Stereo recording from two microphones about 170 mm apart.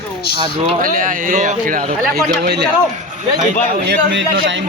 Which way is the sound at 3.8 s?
75° right (ahead or behind).